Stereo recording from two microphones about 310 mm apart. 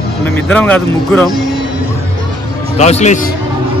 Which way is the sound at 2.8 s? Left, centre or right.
Left.